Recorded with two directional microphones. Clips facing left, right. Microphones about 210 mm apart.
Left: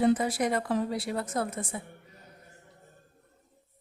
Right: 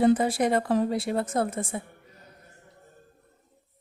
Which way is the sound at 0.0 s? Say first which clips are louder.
Right 4 dB; 30° right (ahead or behind).